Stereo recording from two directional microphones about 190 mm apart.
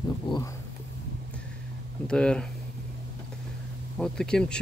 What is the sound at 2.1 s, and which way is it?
Speech, 5° left (ahead or behind).